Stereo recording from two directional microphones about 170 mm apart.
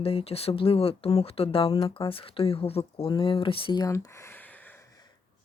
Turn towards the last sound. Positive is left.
turn(degrees=10)  # may be behind; listen again after turning